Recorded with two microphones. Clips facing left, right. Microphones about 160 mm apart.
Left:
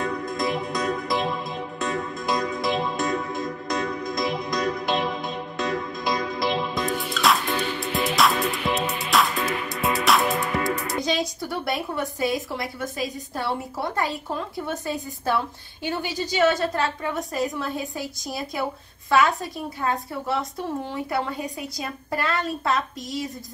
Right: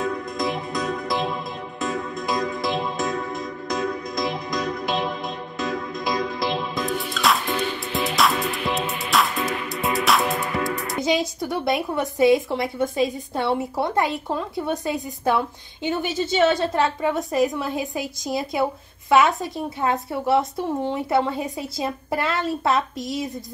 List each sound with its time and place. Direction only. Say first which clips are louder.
0.0 s music: right 1 dB; centre (ahead or behind)
11.1 s a woman's voice: right 6 dB; 20° right (ahead or behind)